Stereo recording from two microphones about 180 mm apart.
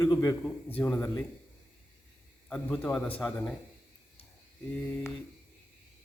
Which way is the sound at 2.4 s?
5° left (ahead or behind).